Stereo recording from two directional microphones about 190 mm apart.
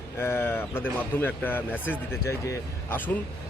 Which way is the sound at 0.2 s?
10° left (ahead or behind).